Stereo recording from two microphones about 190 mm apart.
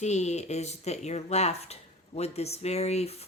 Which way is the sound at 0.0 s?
35° left (ahead or behind).